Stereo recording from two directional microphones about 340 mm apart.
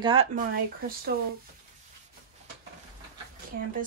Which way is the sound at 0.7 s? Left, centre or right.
Right.